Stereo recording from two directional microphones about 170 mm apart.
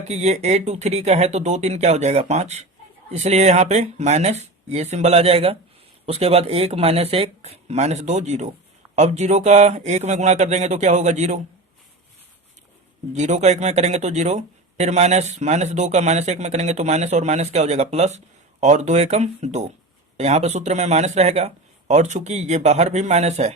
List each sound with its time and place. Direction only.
0.1 s speech: 40° right (ahead or behind)
13.1 s speech: 45° right (ahead or behind)